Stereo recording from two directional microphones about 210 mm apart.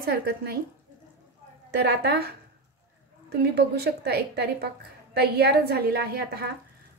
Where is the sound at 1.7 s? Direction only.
50° right (ahead or behind).